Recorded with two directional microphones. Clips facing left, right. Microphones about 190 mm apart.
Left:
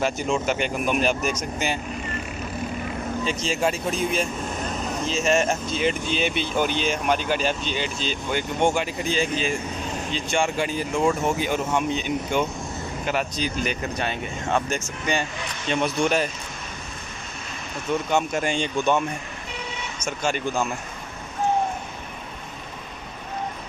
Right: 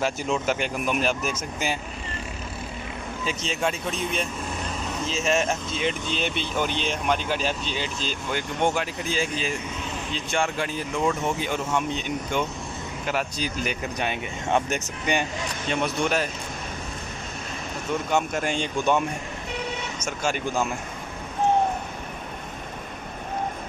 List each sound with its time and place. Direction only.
0.0 s speech: 5° right (ahead or behind)
3.3 s speech: centre (ahead or behind)
13.0 s speech: centre (ahead or behind)
15.7 s speech: centre (ahead or behind)
18.3 s speech: centre (ahead or behind)
20.2 s speech: 10° right (ahead or behind)